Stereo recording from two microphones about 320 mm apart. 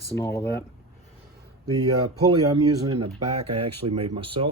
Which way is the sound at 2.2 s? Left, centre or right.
Centre.